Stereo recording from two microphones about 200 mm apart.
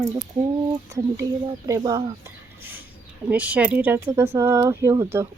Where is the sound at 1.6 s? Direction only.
20° right (ahead or behind).